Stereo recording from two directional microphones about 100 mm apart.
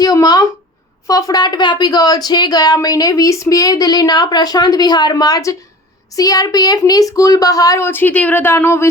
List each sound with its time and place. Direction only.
0.0 s a sound: 40° left (ahead or behind)
1.0 s speech: 40° left (ahead or behind)
7.9 s speech: 20° left (ahead or behind)